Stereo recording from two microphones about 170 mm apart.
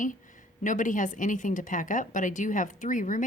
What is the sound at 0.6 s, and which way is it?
Speech, 50° left (ahead or behind).